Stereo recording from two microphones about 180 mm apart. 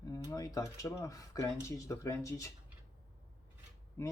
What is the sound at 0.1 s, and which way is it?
Speech, 20° left (ahead or behind).